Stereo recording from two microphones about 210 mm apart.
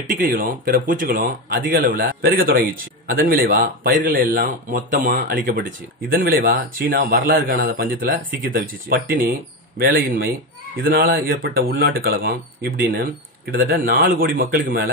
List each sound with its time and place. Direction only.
0.1 s speech: 40° right (ahead or behind)